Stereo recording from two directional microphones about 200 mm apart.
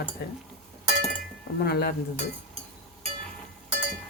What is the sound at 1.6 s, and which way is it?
Cutlery, 55° left (ahead or behind).